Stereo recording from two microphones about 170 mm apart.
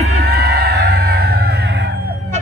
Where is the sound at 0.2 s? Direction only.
70° right (ahead or behind).